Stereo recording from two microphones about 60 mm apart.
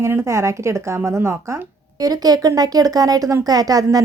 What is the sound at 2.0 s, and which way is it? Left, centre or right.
Speech, right.